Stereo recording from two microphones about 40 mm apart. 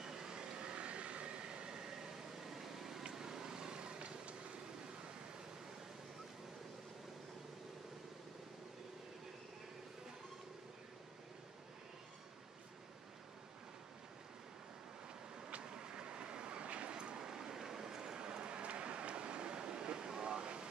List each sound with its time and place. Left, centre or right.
0.0 s vehicle: centre
15.4 s vehicle: right